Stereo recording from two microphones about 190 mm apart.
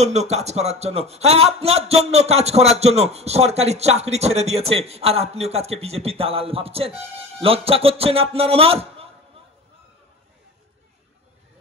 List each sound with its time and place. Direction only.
0.0 s speech: 35° right (ahead or behind)